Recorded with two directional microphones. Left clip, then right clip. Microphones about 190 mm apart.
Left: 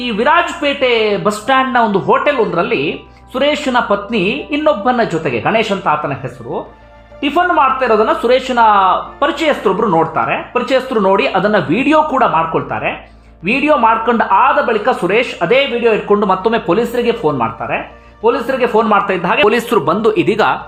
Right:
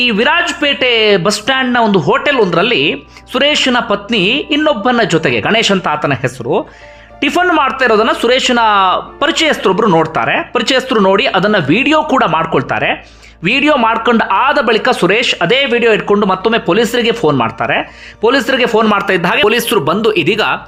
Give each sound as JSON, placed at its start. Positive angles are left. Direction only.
{"t": 0.0, "sound": "speech", "side_deg": -15}
{"t": 16.2, "sound": "speech", "side_deg": -10}